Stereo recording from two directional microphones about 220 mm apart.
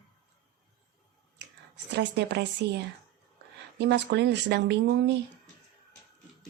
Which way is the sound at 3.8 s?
50° right (ahead or behind).